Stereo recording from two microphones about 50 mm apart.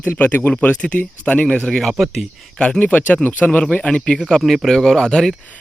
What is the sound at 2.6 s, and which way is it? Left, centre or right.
Speech, left.